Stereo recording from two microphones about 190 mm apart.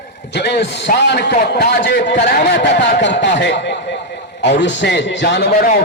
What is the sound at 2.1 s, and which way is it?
A man's voice, 55° left (ahead or behind).